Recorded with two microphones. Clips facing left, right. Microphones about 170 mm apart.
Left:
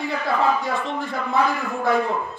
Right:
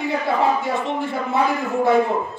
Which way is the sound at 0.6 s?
20° right (ahead or behind).